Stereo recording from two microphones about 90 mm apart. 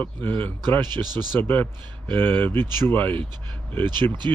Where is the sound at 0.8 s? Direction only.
55° right (ahead or behind).